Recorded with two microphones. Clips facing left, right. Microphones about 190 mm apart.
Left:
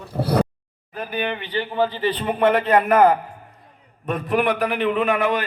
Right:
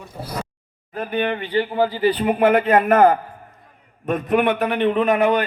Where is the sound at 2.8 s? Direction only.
45° right (ahead or behind).